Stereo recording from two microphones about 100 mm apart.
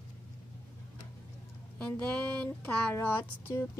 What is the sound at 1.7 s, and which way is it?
Speech, 10° left (ahead or behind).